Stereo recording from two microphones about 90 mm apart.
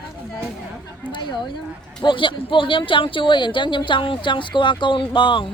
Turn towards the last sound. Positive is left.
turn(degrees=65)  # may be behind; listen again after turning